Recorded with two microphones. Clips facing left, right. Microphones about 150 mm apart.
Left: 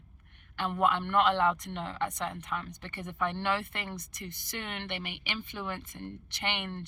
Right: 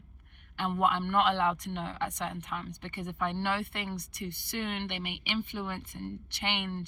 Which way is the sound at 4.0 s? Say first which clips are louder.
Right 4 dB; 65° right (ahead or behind).